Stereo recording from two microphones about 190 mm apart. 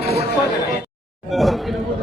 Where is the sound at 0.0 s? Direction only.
55° left (ahead or behind).